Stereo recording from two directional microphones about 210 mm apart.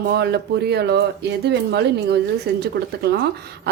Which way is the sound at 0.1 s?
50° right (ahead or behind).